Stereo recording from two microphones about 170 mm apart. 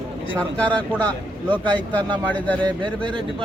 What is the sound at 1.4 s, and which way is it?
Speech, 30° right (ahead or behind).